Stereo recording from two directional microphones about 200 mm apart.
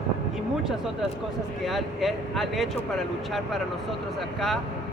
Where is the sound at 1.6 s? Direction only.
Centre (ahead or behind).